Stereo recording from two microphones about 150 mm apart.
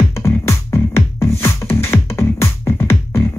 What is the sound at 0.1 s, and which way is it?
Music, 20° left (ahead or behind).